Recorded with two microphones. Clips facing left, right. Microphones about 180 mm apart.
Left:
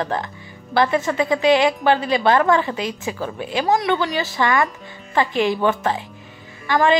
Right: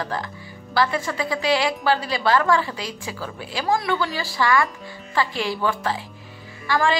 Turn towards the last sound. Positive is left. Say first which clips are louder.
# left 4 dB
turn(degrees=20)  # may be behind; listen again after turning